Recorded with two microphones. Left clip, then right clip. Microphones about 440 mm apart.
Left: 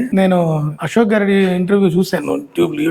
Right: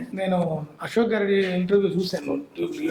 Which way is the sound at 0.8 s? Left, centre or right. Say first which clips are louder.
Left 8 dB; left.